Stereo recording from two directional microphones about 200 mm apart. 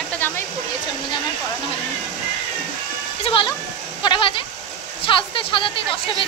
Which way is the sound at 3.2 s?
25° left (ahead or behind).